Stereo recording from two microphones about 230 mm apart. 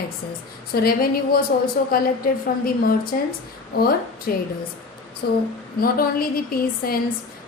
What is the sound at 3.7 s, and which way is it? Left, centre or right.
A woman's voice, left.